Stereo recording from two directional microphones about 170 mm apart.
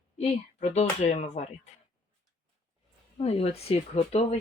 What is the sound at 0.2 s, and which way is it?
Speech, 40° left (ahead or behind).